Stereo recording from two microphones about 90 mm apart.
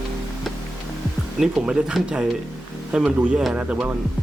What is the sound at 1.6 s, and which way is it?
Speech, 10° right (ahead or behind).